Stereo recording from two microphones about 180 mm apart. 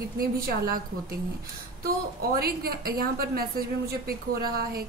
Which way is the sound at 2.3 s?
60° right (ahead or behind).